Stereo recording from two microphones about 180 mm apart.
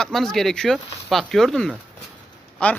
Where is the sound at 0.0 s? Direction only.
Centre (ahead or behind).